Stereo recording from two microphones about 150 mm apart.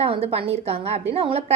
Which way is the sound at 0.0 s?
40° right (ahead or behind).